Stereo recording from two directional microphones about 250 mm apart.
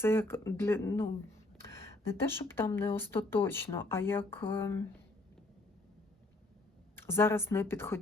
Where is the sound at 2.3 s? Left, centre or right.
Centre.